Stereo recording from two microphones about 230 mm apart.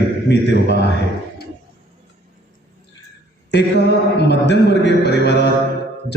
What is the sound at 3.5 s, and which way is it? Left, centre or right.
A man's voice, left.